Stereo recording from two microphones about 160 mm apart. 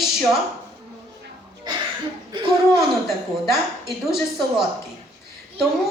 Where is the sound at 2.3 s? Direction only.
30° right (ahead or behind).